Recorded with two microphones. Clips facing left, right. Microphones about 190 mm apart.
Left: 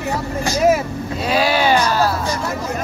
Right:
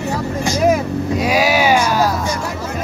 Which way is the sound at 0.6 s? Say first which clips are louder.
Even; 5° left (ahead or behind).